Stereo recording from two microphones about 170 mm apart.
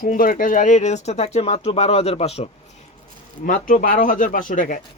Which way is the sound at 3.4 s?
55° left (ahead or behind).